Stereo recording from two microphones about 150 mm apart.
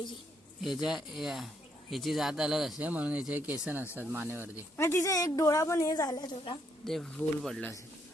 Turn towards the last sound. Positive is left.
turn(degrees=5)  # may be behind; listen again after turning